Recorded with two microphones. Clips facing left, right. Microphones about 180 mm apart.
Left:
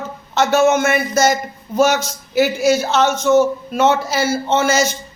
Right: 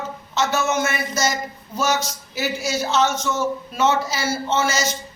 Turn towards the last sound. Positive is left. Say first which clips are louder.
# left 6 dB
turn(degrees=55)  # may be behind; listen again after turning